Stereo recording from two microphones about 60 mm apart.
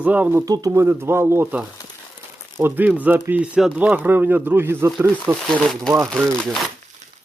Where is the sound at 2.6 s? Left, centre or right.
Right.